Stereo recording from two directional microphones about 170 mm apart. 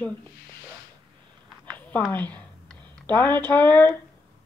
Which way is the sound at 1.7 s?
10° left (ahead or behind).